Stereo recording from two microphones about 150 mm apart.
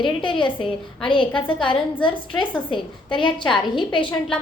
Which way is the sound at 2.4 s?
35° left (ahead or behind).